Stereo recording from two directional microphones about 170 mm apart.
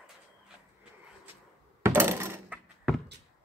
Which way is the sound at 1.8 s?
15° right (ahead or behind).